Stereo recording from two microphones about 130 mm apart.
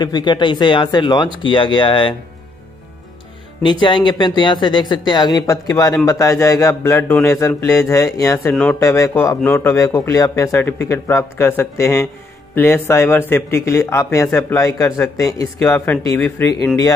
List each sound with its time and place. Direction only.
0.0 s speech: 35° left (ahead or behind)
3.8 s speech: 35° left (ahead or behind)
8.5 s speech: 15° left (ahead or behind)